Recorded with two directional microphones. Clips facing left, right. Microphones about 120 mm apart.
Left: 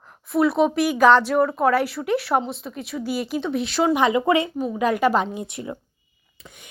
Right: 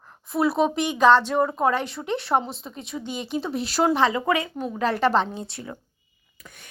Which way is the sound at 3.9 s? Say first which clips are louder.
Left 3 dB; 20° left (ahead or behind).